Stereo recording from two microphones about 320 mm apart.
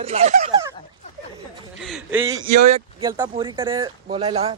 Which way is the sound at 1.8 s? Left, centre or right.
Centre.